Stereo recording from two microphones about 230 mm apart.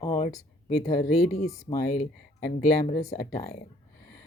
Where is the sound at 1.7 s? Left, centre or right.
Left.